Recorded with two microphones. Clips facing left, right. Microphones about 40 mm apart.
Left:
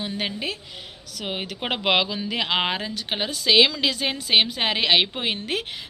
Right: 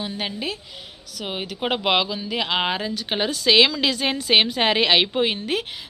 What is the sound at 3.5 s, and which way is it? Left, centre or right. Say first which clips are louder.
Speech: right 1 dB; centre.